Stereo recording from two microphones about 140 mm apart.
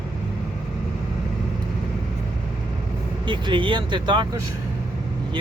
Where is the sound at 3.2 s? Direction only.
35° right (ahead or behind).